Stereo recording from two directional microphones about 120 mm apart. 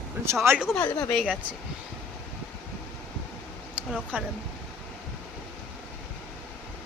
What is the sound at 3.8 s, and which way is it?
Speech, 10° right (ahead or behind).